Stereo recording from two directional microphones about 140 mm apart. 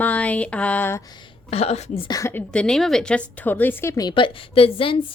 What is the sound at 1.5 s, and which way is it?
Speech, 50° left (ahead or behind).